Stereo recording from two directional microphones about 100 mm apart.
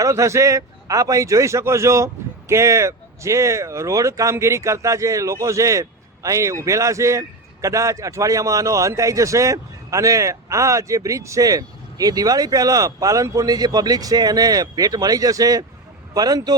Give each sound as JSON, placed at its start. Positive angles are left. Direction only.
{"t": 0.0, "sound": "speech", "side_deg": -30}